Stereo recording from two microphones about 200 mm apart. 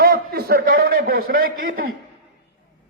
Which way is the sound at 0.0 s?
50° right (ahead or behind).